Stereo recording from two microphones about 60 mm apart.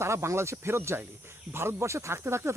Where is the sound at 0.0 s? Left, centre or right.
Right.